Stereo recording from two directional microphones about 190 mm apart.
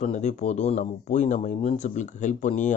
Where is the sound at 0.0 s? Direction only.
35° left (ahead or behind).